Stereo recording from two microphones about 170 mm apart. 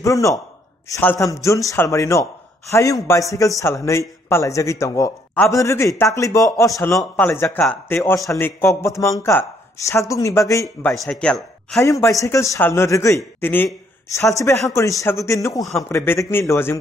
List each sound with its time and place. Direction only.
0.0 s a man's voice: 20° left (ahead or behind)
11.8 s a man's voice: 20° left (ahead or behind)